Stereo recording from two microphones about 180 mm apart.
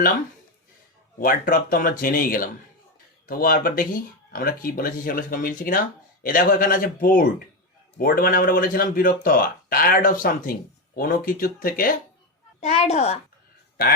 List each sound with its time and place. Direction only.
1.2 s speech: 50° left (ahead or behind)
12.5 s a woman's voice: 35° left (ahead or behind)